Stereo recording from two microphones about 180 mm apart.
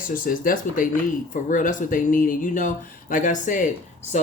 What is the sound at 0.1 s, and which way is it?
Speech, 50° left (ahead or behind).